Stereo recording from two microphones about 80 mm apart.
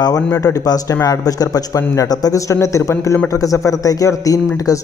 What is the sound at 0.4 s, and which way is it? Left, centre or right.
Speech, left.